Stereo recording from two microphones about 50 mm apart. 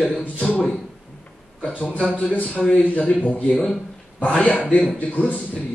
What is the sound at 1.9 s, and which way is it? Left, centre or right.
A man's voice, left.